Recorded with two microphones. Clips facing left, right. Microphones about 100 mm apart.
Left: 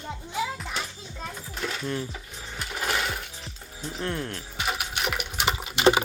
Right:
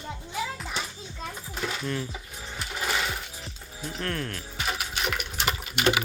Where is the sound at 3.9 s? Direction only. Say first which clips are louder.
Left 1 dB; 15° left (ahead or behind).